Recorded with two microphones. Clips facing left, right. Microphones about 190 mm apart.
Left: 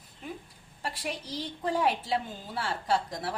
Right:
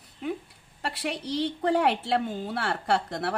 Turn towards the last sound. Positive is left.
turn(degrees=-65)  # may be behind; listen again after turning